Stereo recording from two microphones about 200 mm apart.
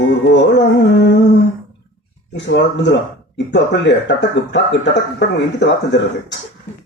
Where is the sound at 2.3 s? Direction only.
60° left (ahead or behind).